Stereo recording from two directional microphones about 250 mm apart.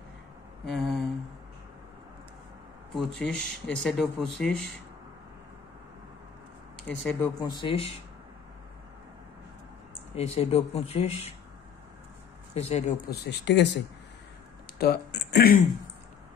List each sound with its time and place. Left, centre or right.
0.7 s a sound: centre
2.9 s speech: centre
6.9 s speech: centre
7.3 s speech: centre
10.1 s speech: left
12.5 s speech: left
14.8 s speech: left